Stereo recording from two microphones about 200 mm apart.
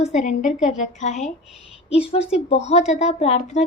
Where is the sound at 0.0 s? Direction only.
35° left (ahead or behind).